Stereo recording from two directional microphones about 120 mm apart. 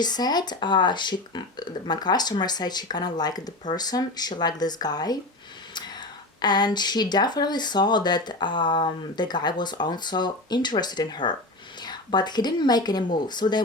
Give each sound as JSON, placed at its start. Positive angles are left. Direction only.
{"t": 0.0, "sound": "speech", "side_deg": 35}